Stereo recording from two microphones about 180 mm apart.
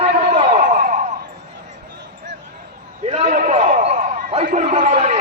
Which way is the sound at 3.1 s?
40° right (ahead or behind).